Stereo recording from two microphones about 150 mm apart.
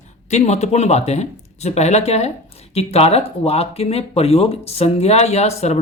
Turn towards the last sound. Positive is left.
turn(degrees=45)  # may be behind; listen again after turning